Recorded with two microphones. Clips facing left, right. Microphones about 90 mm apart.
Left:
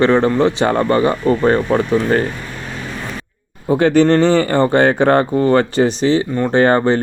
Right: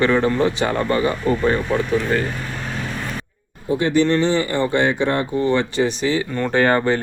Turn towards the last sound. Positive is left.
turn(degrees=25)  # may be behind; listen again after turning